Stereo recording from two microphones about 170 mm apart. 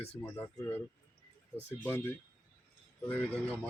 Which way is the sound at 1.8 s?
15° left (ahead or behind).